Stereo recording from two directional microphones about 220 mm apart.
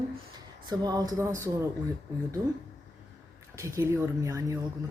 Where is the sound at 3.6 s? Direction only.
15° right (ahead or behind).